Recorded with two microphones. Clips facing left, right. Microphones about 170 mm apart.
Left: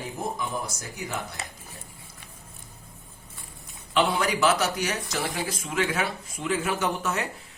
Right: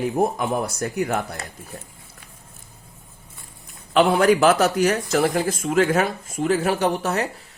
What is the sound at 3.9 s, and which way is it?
Speech, 50° right (ahead or behind).